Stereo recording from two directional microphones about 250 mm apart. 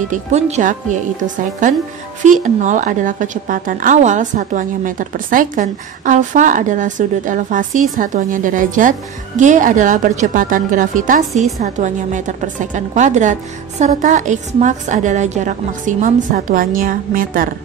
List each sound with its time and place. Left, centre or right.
0.1 s a woman's voice: right